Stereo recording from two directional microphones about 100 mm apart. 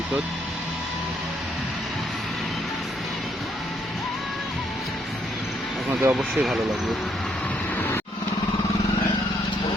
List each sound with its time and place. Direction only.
5.9 s speech: 20° right (ahead or behind)
6.1 s speech: centre (ahead or behind)